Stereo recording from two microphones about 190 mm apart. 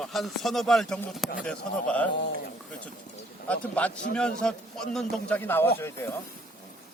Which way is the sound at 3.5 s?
5° left (ahead or behind).